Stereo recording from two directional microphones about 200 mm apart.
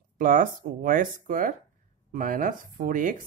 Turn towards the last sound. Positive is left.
turn(degrees=-45)  # may be behind; listen again after turning